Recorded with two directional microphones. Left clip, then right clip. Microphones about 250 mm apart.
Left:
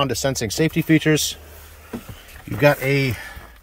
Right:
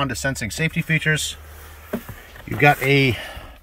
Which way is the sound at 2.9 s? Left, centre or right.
Centre.